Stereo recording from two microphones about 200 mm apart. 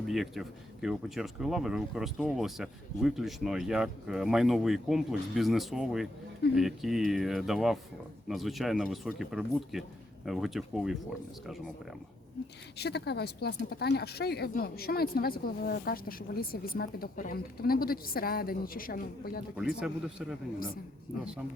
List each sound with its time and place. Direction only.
0.1 s speech: centre (ahead or behind)
12.7 s speech: 55° left (ahead or behind)
19.5 s speech: 5° right (ahead or behind)